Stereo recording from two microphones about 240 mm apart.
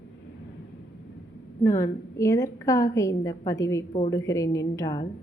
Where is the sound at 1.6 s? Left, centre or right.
Centre.